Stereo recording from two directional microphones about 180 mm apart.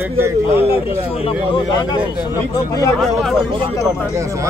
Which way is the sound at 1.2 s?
25° left (ahead or behind).